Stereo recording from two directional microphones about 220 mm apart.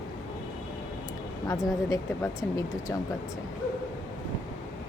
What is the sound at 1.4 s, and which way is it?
Speech, 15° left (ahead or behind).